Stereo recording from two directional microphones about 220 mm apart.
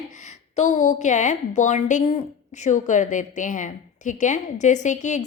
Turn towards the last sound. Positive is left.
turn(degrees=35)  # may be behind; listen again after turning